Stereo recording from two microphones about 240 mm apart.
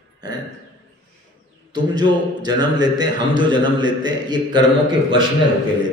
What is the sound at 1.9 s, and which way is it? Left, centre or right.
Speech, centre.